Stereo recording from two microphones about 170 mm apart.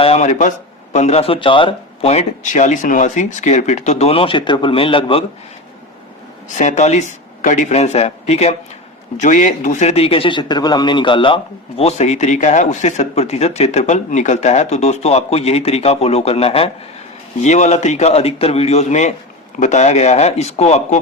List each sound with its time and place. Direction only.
0.0 s speech: 40° left (ahead or behind)
6.6 s speech: 45° left (ahead or behind); by 11.3 s 30° left (ahead or behind)
11.8 s speech: 40° left (ahead or behind)